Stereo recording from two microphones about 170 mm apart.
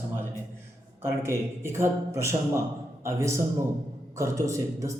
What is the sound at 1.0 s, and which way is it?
A man's voice, 15° right (ahead or behind).